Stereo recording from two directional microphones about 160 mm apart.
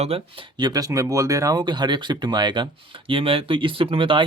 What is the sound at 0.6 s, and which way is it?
Speech, 25° right (ahead or behind).